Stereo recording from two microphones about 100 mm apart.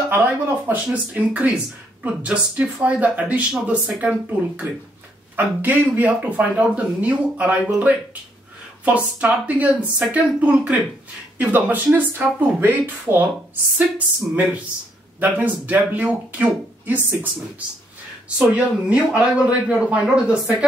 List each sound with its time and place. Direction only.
0.1 s speech: 20° right (ahead or behind)
18.4 s speech: 10° right (ahead or behind)